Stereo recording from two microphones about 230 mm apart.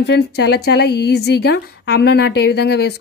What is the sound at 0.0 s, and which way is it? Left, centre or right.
A woman's voice, left.